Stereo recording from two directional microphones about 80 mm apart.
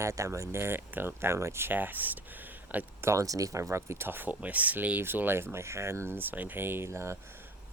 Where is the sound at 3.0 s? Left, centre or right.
Right.